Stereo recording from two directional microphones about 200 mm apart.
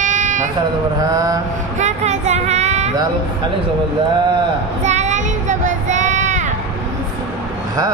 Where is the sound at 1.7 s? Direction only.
35° right (ahead or behind).